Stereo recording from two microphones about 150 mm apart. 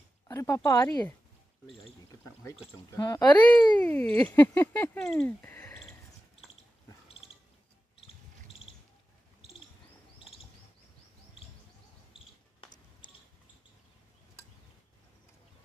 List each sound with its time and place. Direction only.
0.3 s speech: 20° left (ahead or behind)
2.9 s speech: 25° left (ahead or behind)
3.7 s speech: 10° left (ahead or behind)
5.2 s a sound: 10° left (ahead or behind)
8.0 s cricket: 40° left (ahead or behind)
12.6 s a sound: 35° left (ahead or behind)